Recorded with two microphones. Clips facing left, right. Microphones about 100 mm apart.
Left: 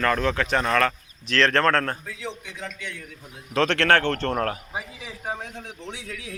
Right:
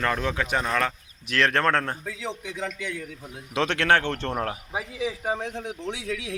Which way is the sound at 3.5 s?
15° right (ahead or behind).